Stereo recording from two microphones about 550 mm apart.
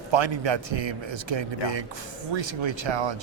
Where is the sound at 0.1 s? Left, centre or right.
Right.